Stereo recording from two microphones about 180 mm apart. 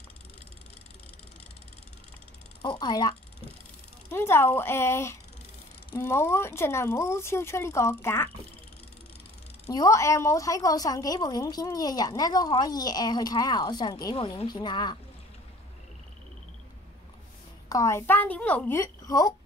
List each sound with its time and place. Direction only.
2.6 s a woman's voice: 25° left (ahead or behind)
9.7 s a woman's voice: 15° left (ahead or behind)
17.6 s speech: 15° left (ahead or behind)